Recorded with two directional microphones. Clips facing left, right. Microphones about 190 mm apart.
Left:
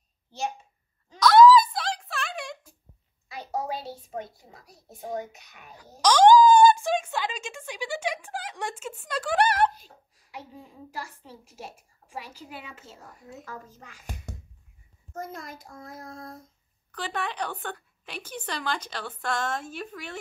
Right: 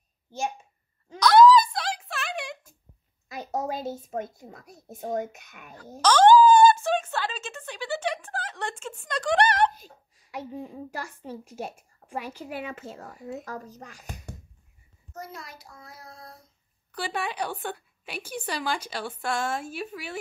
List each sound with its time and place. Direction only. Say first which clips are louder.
1.2 s a sound: left 1 dB; centre (ahead or behind)
3.3 s a child's voice: right 1 dB; 45° right (ahead or behind)
5.9 s a sound: even; 15° left (ahead or behind)
10.3 s a woman's voice: right 8 dB; 60° right (ahead or behind)
13.5 s a child's voice: right 4 dB; 40° right (ahead or behind)
15.1 s child singing: left 3 dB; 50° left (ahead or behind)
16.9 s a woman's voice: right 1 dB; 10° right (ahead or behind)